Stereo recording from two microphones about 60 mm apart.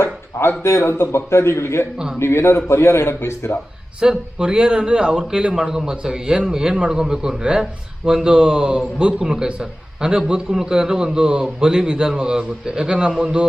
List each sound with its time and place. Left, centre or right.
0.0 s a sound: left
0.6 s a man's voice: left
4.0 s a man's voice: centre